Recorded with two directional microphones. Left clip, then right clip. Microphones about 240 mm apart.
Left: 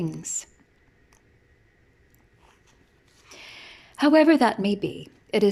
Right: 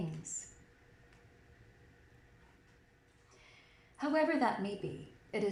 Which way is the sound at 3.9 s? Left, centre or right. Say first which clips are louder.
Left 15 dB; left.